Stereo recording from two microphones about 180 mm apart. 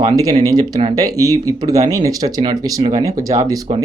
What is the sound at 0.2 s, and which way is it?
Speech, 20° right (ahead or behind).